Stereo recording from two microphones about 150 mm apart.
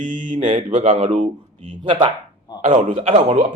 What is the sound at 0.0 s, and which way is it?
Speech, 60° right (ahead or behind).